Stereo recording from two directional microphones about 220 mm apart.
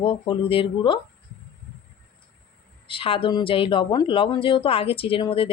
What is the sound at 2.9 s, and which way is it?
Speech, 25° left (ahead or behind).